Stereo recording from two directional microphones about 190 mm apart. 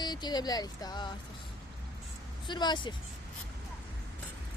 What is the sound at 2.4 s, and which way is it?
Speech, 25° left (ahead or behind).